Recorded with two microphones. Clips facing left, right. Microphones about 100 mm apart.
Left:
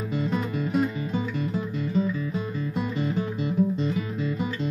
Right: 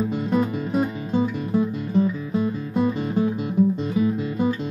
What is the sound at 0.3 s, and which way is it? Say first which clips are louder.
Music: right 5 dB; 15° right (ahead or behind).